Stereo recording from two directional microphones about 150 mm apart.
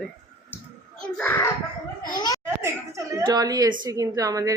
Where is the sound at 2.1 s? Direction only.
25° left (ahead or behind).